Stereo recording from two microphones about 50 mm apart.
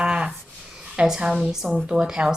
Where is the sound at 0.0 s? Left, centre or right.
Centre.